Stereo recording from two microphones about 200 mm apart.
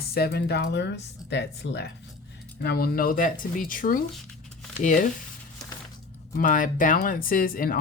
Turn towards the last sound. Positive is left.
turn(degrees=45)  # may be behind; listen again after turning